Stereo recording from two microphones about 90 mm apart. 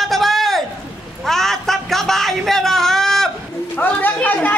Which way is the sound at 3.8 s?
20° left (ahead or behind).